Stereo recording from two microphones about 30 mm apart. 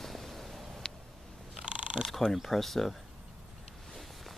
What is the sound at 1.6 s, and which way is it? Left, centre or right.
Mechanisms, right.